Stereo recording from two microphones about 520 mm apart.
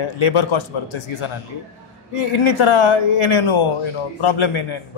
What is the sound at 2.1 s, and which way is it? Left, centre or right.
Speech, left.